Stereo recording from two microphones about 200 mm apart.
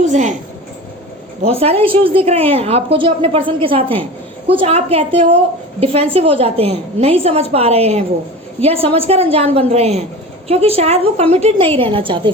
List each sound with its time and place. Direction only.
0.0 s speech: 35° right (ahead or behind)
1.4 s a woman's voice: 30° right (ahead or behind)